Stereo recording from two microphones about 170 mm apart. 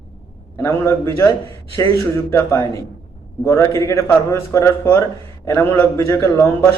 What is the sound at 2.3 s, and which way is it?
Speech, 15° left (ahead or behind).